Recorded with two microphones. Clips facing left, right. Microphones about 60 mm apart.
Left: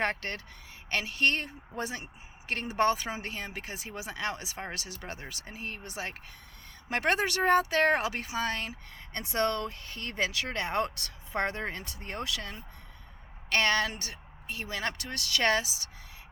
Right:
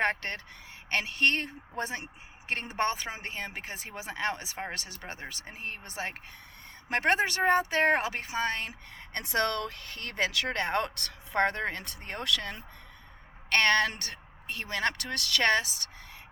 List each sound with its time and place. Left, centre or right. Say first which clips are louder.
0.0 s speech: right 2 dB; right
9.1 s speech: even; right